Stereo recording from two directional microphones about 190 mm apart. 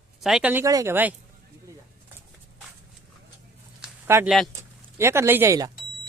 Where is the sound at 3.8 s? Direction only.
10° right (ahead or behind).